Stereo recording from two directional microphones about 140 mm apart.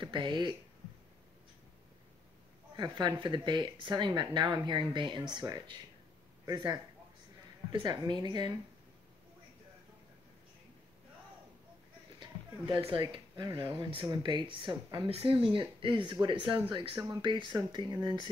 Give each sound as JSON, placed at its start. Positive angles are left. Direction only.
{"t": 0.0, "sound": "speech", "side_deg": -35}
{"t": 2.7, "sound": "speech", "side_deg": -30}
{"t": 12.2, "sound": "a sound", "side_deg": -30}
{"t": 13.0, "sound": "speech", "side_deg": -35}